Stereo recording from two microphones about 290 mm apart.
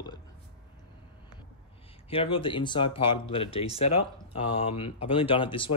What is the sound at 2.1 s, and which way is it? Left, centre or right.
Speech, centre.